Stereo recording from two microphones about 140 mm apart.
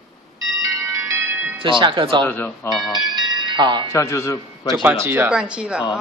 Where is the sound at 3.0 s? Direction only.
30° right (ahead or behind).